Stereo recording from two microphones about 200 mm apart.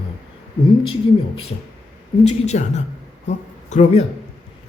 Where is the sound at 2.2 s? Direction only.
35° left (ahead or behind).